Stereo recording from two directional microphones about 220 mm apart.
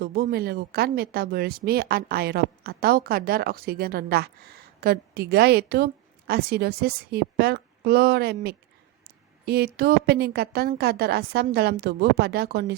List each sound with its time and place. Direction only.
0.0 s speech: 45° right (ahead or behind)